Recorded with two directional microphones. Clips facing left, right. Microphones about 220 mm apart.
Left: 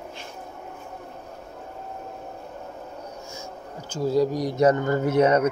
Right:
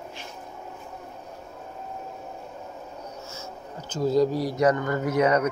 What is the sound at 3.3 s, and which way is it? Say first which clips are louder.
Speech: left 1 dB; 10° left (ahead or behind).